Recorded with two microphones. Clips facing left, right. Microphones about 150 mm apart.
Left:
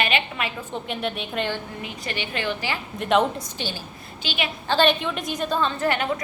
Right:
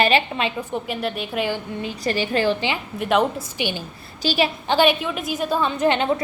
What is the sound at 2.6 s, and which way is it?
Speech, 20° right (ahead or behind).